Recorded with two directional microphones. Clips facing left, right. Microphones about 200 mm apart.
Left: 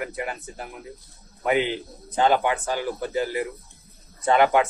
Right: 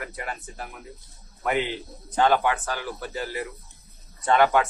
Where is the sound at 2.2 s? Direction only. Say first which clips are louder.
Left 1 dB; 20° left (ahead or behind).